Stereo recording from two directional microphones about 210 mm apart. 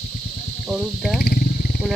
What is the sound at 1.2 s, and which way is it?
Wild animals, 45° left (ahead or behind).